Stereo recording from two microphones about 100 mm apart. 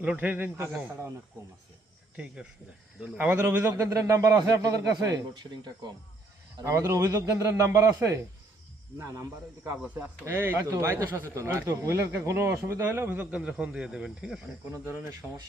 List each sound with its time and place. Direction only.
0.0 s speech: 15° right (ahead or behind)
2.1 s a man's voice: 10° right (ahead or behind); by 5.5 s 45° right (ahead or behind)
6.6 s a man's voice: 30° right (ahead or behind)
9.8 s speech: 15° right (ahead or behind)